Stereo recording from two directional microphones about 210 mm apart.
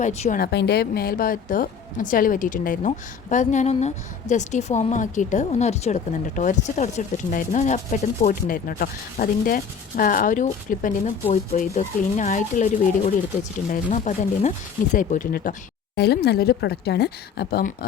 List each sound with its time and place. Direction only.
0.0 s a woman's voice: 35° left (ahead or behind)
0.3 s a woman's voice: 50° left (ahead or behind)
16.0 s speech: 50° left (ahead or behind)